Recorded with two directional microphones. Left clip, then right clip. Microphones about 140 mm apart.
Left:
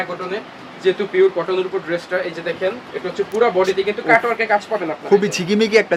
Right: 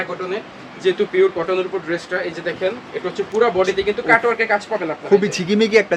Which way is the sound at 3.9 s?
10° right (ahead or behind).